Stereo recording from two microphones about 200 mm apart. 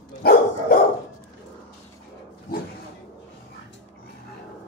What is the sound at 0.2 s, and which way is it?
Dog, 50° left (ahead or behind).